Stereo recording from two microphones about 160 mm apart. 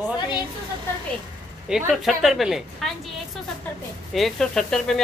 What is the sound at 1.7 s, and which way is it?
Speech, centre (ahead or behind).